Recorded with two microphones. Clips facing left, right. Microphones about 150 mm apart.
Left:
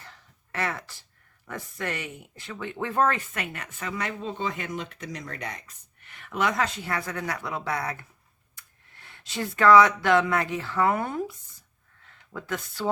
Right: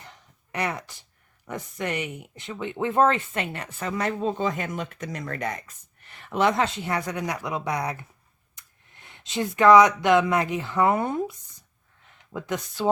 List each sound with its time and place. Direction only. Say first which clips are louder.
0.0 s a sound: right 2 dB; 20° right (ahead or behind)
1.5 s speech: right 3 dB; 20° right (ahead or behind); by 5.7 s 50° right (ahead or behind)
6.1 s speech: right 4 dB; 30° right (ahead or behind)